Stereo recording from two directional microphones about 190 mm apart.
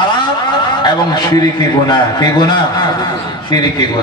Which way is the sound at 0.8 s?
20° left (ahead or behind).